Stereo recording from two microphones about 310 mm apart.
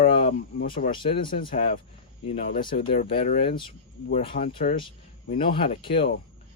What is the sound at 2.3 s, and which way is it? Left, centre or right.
Speech, left.